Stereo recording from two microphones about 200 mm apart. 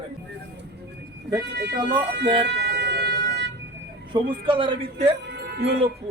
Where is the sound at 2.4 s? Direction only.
55° right (ahead or behind).